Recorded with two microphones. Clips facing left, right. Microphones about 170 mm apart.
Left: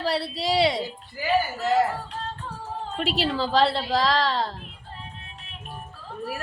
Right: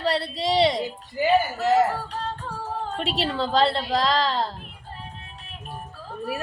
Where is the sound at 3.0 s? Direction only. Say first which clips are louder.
Left 2 dB; centre (ahead or behind).